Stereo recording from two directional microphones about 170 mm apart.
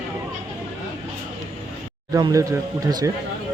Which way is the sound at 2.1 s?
20° right (ahead or behind).